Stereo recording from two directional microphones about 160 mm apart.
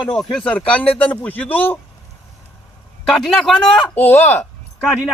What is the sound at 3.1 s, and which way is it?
Speech, 5° left (ahead or behind).